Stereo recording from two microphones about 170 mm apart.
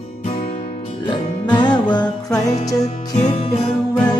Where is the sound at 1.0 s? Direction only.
25° left (ahead or behind).